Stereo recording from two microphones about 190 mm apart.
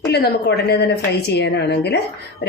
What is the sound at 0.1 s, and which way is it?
Speech, 60° left (ahead or behind).